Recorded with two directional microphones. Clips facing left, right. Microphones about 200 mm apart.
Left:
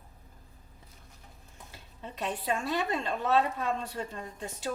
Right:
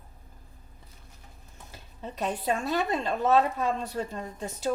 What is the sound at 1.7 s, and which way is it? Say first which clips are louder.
A woman's voice: right 5 dB; 40° right (ahead or behind).